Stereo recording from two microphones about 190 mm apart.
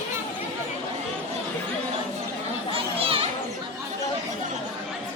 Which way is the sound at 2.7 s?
30° right (ahead or behind).